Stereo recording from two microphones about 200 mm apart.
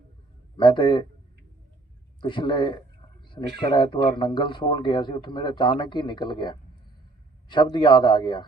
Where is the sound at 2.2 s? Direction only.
25° left (ahead or behind).